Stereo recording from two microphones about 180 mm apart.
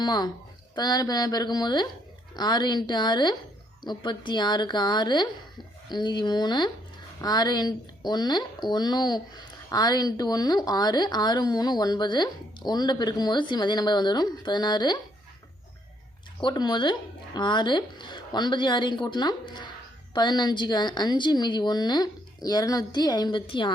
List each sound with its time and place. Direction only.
0.0 s speech: 25° left (ahead or behind)
16.4 s speech: 25° left (ahead or behind)